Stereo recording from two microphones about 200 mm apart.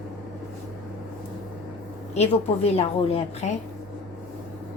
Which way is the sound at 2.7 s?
30° left (ahead or behind).